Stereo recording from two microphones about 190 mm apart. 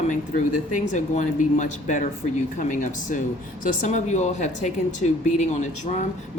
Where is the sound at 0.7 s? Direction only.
40° left (ahead or behind).